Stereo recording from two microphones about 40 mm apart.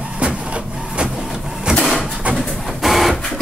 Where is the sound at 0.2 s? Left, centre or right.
Right.